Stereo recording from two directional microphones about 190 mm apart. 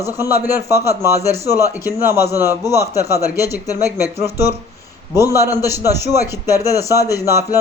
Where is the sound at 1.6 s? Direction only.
15° left (ahead or behind).